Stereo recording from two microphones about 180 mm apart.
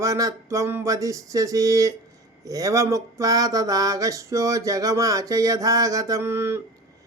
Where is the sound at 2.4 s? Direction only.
20° right (ahead or behind).